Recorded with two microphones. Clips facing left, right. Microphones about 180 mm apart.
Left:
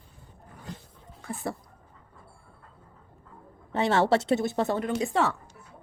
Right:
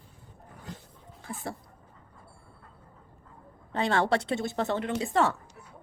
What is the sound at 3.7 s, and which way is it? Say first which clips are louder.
Speech: left 3 dB; 20° left (ahead or behind).